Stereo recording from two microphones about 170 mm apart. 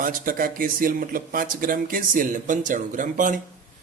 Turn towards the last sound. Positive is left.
turn(degrees=-50)  # may be behind; listen again after turning